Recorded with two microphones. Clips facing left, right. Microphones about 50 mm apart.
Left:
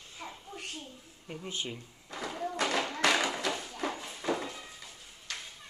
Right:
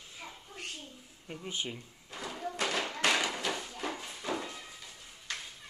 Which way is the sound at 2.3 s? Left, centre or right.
Centre.